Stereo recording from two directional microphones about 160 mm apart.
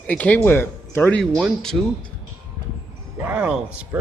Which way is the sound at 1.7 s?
10° right (ahead or behind).